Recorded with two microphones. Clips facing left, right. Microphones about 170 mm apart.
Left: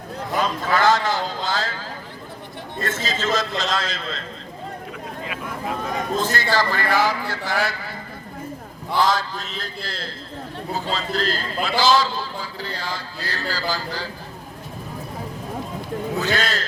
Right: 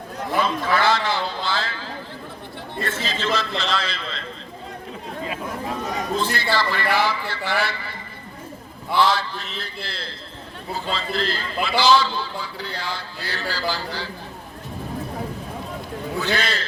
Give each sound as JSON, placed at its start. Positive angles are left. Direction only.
{"t": 0.3, "sound": "a sound", "side_deg": 40}
{"t": 2.8, "sound": "a man's voice", "side_deg": 45}
{"t": 5.9, "sound": "a man's voice", "side_deg": 50}
{"t": 9.0, "sound": "a man's voice", "side_deg": 45}
{"t": 12.8, "sound": "a sound", "side_deg": 40}
{"t": 16.2, "sound": "a man's voice", "side_deg": 45}